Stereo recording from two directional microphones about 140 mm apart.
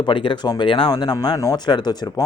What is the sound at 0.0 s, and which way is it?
Speech, 35° left (ahead or behind).